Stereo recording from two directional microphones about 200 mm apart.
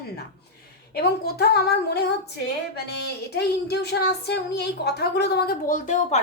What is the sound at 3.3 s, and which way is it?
A woman's voice, 55° left (ahead or behind).